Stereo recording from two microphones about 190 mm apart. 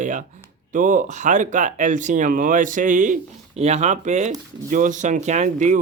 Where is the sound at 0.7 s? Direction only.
45° right (ahead or behind).